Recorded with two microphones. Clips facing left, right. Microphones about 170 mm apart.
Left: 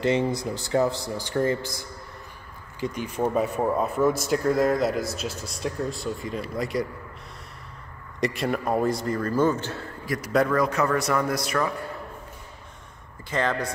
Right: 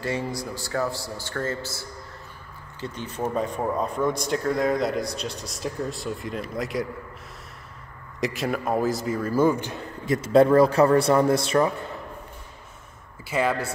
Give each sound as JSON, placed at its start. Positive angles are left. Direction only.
{"t": 0.0, "sound": "speech", "side_deg": 20}
{"t": 8.2, "sound": "a man's voice", "side_deg": 0}
{"t": 13.2, "sound": "speech", "side_deg": -10}